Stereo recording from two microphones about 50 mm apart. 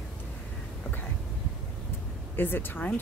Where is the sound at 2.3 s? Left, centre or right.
Left.